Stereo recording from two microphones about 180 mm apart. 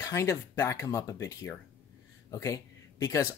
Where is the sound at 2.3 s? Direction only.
15° left (ahead or behind).